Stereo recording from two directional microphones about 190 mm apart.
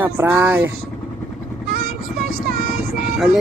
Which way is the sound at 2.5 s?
50° right (ahead or behind).